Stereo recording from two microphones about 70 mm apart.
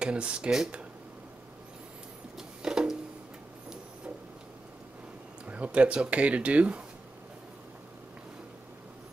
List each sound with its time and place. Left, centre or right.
0.0 s speech: centre
2.3 s a sound: centre
5.5 s speech: centre